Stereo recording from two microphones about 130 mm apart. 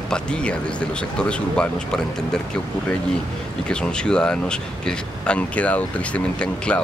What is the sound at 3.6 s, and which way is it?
A man's voice, 5° left (ahead or behind).